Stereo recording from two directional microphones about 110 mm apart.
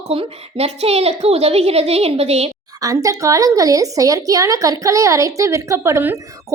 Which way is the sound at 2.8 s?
30° right (ahead or behind).